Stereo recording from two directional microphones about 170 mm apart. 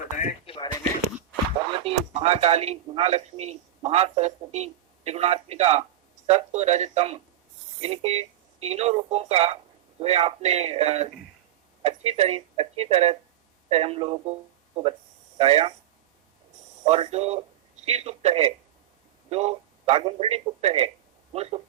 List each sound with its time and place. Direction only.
0.2 s a sound: 35° left (ahead or behind)
1.7 s speech: 35° right (ahead or behind)
15.4 s speech: 35° right (ahead or behind)
16.8 s speech: 40° right (ahead or behind)